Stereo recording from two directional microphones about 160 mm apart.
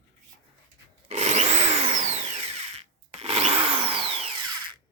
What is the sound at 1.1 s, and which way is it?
Power tool, 45° right (ahead or behind).